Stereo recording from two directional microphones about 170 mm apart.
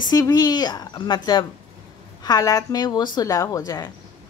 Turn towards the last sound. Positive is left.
turn(degrees=25)  # may be behind; listen again after turning